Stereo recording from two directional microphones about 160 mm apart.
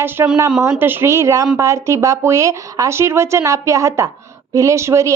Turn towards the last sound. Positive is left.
turn(degrees=-20)  # may be behind; listen again after turning